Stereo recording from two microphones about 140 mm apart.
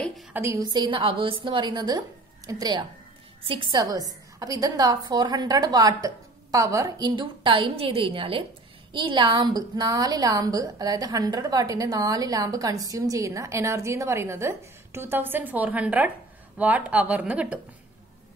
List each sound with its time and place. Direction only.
0.3 s a woman's voice: 20° right (ahead or behind)
0.6 s a woman's voice: 30° right (ahead or behind); by 17.6 s 10° right (ahead or behind)